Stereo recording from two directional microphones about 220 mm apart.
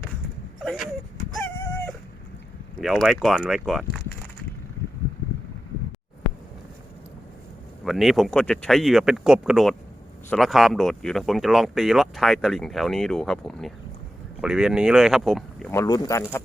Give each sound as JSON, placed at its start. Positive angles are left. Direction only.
{"t": 0.6, "sound": "a sound", "side_deg": 0}
{"t": 1.3, "sound": "dog", "side_deg": 5}
{"t": 2.8, "sound": "speech", "side_deg": 0}
{"t": 7.9, "sound": "speech", "side_deg": 0}